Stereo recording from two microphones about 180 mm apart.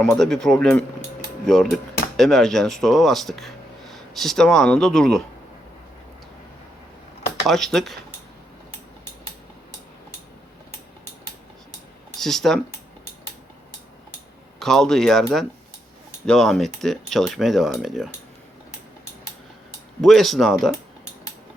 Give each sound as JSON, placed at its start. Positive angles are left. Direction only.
{"t": 0.0, "sound": "speech", "side_deg": 0}
{"t": 7.4, "sound": "speech", "side_deg": 0}
{"t": 12.2, "sound": "speech", "side_deg": 0}
{"t": 14.6, "sound": "speech", "side_deg": 0}
{"t": 20.0, "sound": "speech", "side_deg": 0}